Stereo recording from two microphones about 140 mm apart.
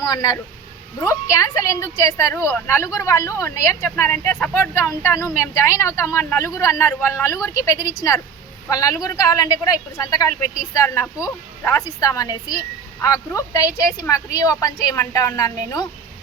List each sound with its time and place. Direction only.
0.0 s speech: 25° left (ahead or behind)